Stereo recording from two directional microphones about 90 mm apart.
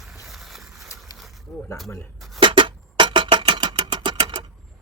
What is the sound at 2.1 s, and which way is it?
Cutlery, centre (ahead or behind).